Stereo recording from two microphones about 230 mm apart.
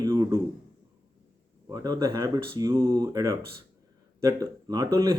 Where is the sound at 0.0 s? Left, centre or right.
Centre.